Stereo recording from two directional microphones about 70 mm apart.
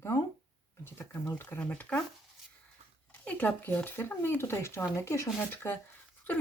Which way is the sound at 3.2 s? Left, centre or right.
Centre.